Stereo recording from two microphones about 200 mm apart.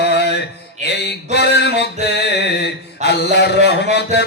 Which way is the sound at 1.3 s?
55° left (ahead or behind).